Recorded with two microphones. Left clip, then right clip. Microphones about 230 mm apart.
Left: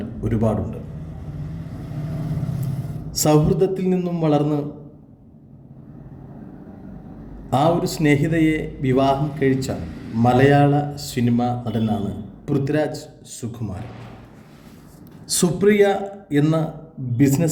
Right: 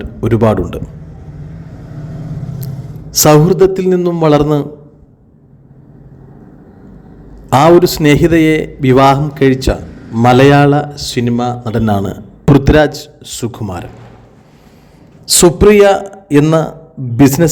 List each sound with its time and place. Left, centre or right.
0.0 s a man's voice: right
3.1 s a man's voice: right
7.5 s a man's voice: right
15.3 s a man's voice: right